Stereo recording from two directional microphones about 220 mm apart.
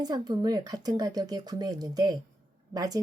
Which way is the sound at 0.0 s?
20° right (ahead or behind).